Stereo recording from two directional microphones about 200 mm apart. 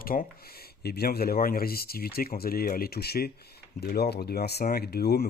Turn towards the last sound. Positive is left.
turn(degrees=50)  # may be behind; listen again after turning